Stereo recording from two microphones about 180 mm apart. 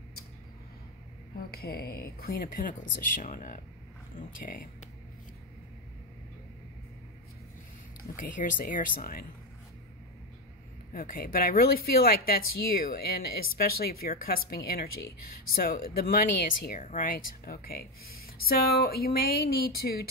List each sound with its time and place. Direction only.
1.5 s speech: 60° left (ahead or behind)
8.0 s speech: 50° left (ahead or behind)
10.9 s speech: 50° left (ahead or behind)